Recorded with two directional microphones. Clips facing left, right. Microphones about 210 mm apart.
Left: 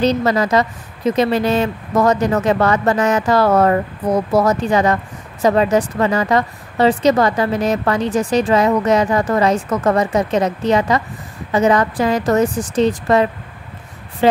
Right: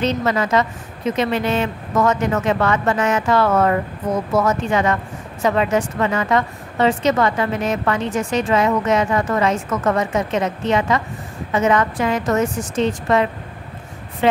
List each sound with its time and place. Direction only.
0.0 s a woman's voice: 35° left (ahead or behind)